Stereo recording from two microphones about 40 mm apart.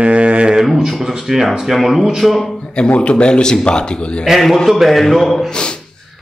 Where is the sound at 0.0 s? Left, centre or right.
Right.